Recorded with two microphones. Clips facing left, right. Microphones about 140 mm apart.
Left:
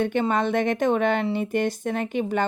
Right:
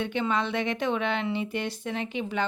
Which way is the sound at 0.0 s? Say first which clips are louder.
Left 5 dB; 50° left (ahead or behind).